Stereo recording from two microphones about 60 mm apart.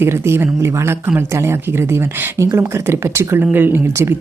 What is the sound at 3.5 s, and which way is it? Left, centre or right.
Speech, right.